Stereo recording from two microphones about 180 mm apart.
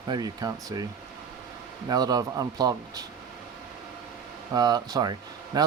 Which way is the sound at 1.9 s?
20° right (ahead or behind).